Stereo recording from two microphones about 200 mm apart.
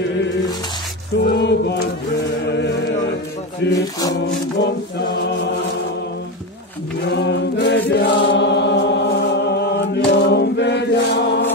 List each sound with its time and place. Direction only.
1.2 s music: 55° left (ahead or behind)
3.7 s music: 15° left (ahead or behind)
4.6 s a sound: 60° left (ahead or behind)
7.1 s chant: 60° left (ahead or behind)
8.3 s music: 60° left (ahead or behind)